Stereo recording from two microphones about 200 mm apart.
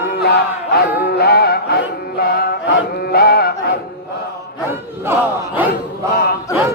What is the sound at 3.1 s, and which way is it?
Chant, 50° left (ahead or behind).